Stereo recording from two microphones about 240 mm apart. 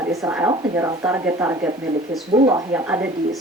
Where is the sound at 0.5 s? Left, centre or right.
Right.